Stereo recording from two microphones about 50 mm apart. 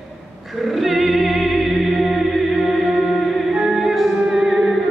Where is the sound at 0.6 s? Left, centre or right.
Centre.